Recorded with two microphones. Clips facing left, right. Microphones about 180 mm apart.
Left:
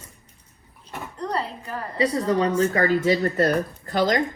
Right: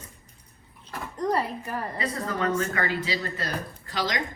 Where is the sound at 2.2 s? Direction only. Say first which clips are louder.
Left 3 dB; 35° left (ahead or behind).